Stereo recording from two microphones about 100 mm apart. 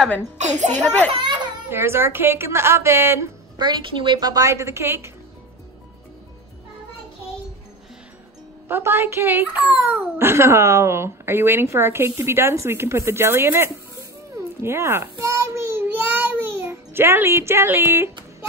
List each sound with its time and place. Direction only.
1.1 s a child's voice: 50° right (ahead or behind)
1.7 s a child's voice: 25° right (ahead or behind)
3.5 s a woman's voice: 50° right (ahead or behind)
4.3 s a child's voice: 35° right (ahead or behind)
8.6 s a child's voice: 25° right (ahead or behind)
14.6 s a sound: 25° right (ahead or behind)